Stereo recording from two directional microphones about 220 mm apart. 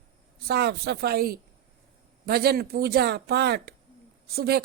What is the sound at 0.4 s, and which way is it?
A woman's voice, 45° right (ahead or behind).